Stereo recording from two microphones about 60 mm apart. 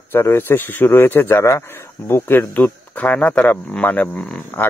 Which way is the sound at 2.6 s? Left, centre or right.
Left.